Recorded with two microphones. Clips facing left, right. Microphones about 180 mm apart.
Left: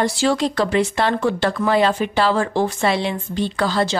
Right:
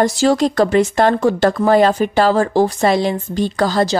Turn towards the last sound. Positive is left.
turn(degrees=-40)  # may be behind; listen again after turning